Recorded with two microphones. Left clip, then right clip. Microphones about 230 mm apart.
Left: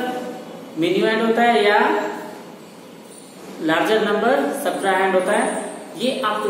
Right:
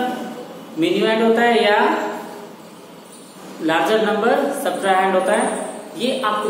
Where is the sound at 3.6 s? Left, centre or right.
Centre.